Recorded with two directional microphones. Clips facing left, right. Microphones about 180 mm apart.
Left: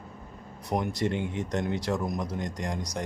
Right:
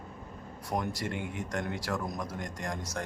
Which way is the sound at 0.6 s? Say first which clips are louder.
Left 5 dB; 20° left (ahead or behind).